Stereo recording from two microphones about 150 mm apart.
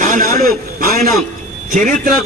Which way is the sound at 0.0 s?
65° right (ahead or behind).